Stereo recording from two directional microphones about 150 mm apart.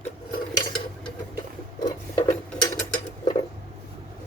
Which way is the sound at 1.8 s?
25° left (ahead or behind).